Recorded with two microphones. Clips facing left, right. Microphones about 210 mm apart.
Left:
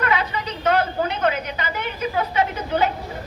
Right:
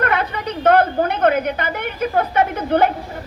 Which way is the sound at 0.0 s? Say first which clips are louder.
Right 3 dB; 55° right (ahead or behind).